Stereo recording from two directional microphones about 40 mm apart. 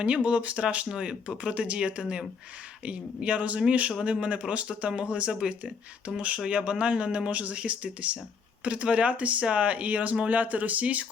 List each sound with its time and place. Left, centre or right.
0.0 s speech: right